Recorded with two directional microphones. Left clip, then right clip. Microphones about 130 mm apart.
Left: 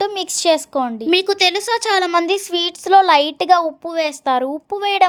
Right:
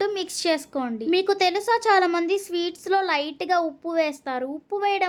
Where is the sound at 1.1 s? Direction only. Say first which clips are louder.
Left 5 dB; 60° left (ahead or behind).